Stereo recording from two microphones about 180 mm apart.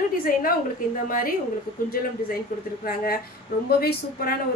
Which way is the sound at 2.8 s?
55° left (ahead or behind).